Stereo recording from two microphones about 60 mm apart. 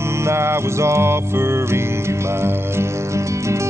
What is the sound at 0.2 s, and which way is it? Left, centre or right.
Music, right.